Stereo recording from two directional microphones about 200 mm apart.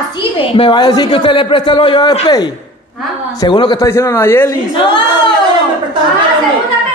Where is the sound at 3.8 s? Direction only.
15° left (ahead or behind).